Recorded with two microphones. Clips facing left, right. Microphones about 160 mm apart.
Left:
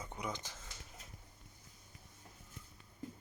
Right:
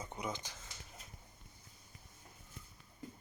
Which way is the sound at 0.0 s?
25° right (ahead or behind).